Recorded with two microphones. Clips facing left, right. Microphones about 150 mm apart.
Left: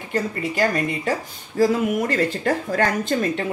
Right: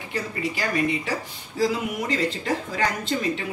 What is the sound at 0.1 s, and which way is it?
A woman's voice, 45° left (ahead or behind).